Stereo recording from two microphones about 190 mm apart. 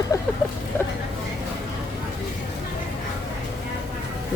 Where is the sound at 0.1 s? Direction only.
15° left (ahead or behind).